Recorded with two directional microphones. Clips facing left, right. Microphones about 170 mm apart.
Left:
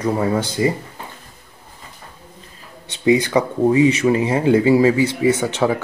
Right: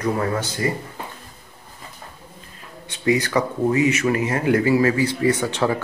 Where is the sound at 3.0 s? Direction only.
20° left (ahead or behind).